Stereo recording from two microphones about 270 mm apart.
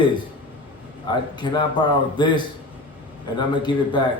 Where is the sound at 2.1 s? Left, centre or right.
Centre.